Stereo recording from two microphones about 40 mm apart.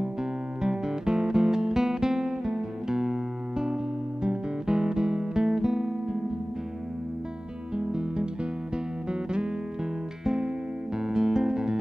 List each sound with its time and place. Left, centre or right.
0.0 s music: centre
7.7 s music: centre
10.2 s music: centre